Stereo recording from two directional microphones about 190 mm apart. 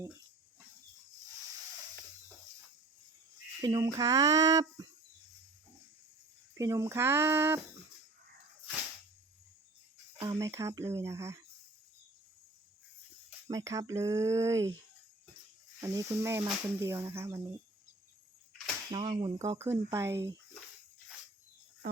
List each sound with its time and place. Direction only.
3.6 s speech: 20° right (ahead or behind)
6.5 s speech: 15° right (ahead or behind)
10.2 s speech: 15° right (ahead or behind)
13.5 s speech: 20° right (ahead or behind)
15.8 s speech: 15° right (ahead or behind)
18.9 s speech: 25° right (ahead or behind)
19.5 s speech: 15° right (ahead or behind)